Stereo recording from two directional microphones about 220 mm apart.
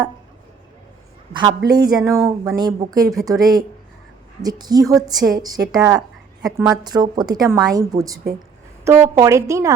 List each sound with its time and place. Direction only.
1.3 s a woman's voice: 20° right (ahead or behind)